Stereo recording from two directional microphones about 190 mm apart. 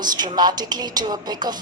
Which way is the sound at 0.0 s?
20° right (ahead or behind).